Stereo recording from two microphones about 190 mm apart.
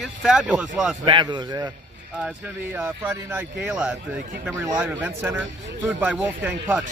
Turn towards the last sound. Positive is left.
turn(degrees=-5)  # may be behind; listen again after turning